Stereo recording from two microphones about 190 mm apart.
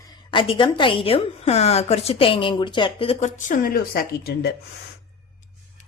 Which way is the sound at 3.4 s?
45° left (ahead or behind).